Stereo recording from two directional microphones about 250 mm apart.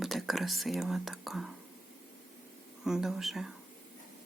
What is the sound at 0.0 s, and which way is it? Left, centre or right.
Speech, centre.